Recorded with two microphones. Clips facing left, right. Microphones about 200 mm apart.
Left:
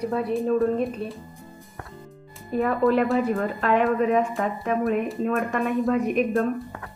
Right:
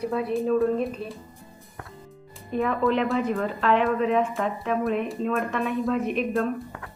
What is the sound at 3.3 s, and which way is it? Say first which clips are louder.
Speech: even; 45° left (ahead or behind).